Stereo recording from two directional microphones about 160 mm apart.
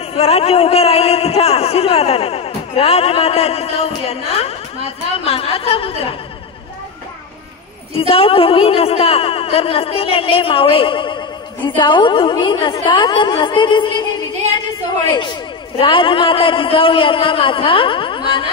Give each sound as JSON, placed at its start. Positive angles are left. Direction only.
{"t": 0.1, "sound": "speech", "side_deg": 40}
{"t": 8.1, "sound": "speech", "side_deg": 35}
{"t": 15.8, "sound": "speech", "side_deg": 35}